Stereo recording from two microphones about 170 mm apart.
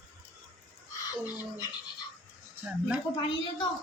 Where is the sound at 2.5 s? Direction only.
5° right (ahead or behind).